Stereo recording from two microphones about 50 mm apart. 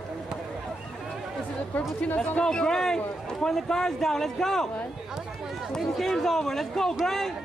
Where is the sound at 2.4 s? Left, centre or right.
Centre.